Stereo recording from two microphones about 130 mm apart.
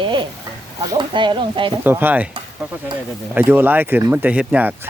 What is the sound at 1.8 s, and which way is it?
Speech, 15° right (ahead or behind).